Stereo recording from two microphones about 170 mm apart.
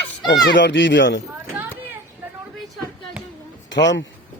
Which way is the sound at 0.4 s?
90° left.